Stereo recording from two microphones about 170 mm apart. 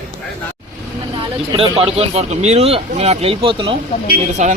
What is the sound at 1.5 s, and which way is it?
Speech, 35° right (ahead or behind).